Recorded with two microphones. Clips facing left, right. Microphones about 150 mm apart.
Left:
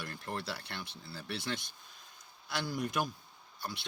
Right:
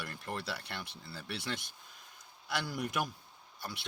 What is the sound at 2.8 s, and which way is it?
Speech, 60° right (ahead or behind).